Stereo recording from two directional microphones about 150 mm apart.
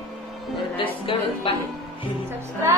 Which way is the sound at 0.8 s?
35° left (ahead or behind).